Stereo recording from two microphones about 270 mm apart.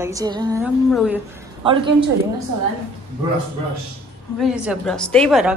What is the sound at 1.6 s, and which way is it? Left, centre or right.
Speech, centre.